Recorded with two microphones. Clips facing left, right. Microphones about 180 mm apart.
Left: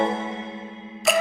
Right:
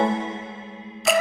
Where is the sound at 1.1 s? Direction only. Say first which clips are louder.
Right 1 dB; centre (ahead or behind).